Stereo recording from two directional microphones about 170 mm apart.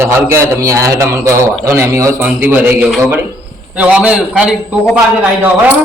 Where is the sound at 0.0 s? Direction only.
15° right (ahead or behind).